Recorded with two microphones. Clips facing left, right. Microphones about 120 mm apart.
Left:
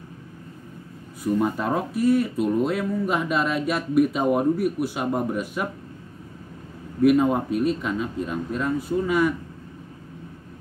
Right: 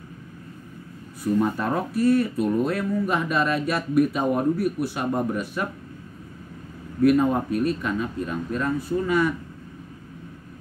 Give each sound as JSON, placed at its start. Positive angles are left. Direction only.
{"t": 1.4, "sound": "speech", "side_deg": 15}
{"t": 7.0, "sound": "speech", "side_deg": 15}